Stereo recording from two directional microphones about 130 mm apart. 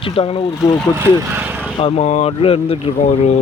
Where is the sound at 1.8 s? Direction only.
45° left (ahead or behind).